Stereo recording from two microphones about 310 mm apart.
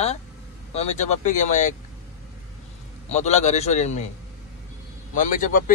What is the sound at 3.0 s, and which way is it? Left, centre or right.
Speech, left.